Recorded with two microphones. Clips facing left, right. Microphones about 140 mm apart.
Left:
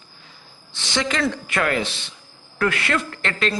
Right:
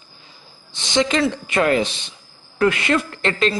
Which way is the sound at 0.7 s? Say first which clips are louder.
Right 5 dB; 20° right (ahead or behind).